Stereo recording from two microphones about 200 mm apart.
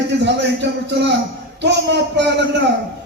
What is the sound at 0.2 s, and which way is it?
A man's voice, 60° right (ahead or behind).